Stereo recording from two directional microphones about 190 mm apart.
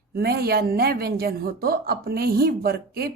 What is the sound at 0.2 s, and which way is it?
A woman's voice, 55° right (ahead or behind).